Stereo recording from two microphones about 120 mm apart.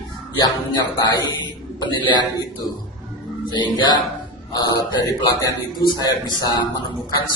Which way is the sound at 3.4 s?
40° left (ahead or behind).